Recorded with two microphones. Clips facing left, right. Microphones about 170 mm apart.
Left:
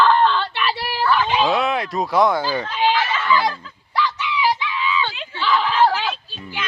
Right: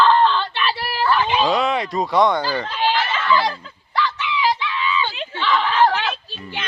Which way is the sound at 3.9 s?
10° left (ahead or behind).